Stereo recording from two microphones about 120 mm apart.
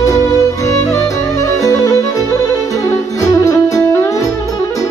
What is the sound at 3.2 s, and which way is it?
Music, 25° left (ahead or behind).